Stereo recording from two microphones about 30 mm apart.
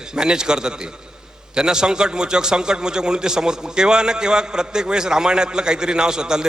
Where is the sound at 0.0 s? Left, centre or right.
Right.